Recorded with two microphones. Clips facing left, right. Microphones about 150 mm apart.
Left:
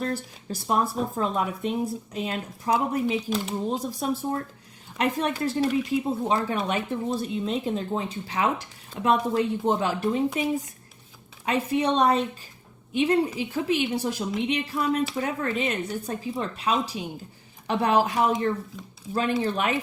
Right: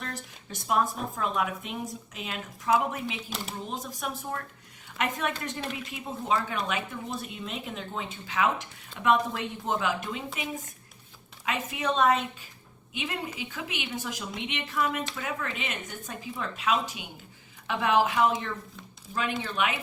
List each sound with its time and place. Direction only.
0.0 s speech: 35° left (ahead or behind)
3.2 s speech: centre (ahead or behind)
3.5 s speech: 30° left (ahead or behind)